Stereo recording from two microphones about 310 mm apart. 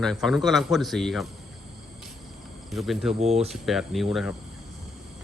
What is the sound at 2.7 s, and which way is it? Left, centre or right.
Speech, centre.